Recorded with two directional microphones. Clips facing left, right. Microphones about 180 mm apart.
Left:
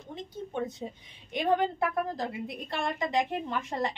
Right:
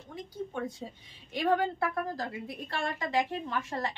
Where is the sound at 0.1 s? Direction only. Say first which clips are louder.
Left 1 dB; 20° left (ahead or behind).